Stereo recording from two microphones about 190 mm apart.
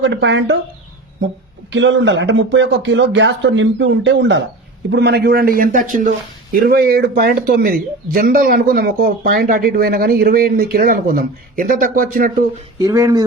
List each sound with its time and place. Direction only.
0.0 s speech: 70° right (ahead or behind)
1.7 s speech: 75° right (ahead or behind); by 12.3 s 50° right (ahead or behind)
12.8 s speech: 15° right (ahead or behind)